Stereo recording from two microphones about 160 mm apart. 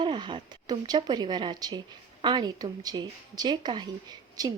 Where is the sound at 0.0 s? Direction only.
30° right (ahead or behind).